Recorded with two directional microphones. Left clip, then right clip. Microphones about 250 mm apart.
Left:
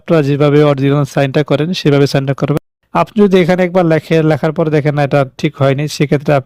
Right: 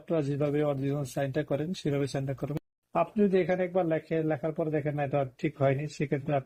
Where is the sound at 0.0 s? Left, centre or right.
Left.